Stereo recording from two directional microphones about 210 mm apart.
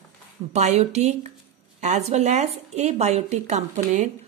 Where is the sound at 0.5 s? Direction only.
30° right (ahead or behind).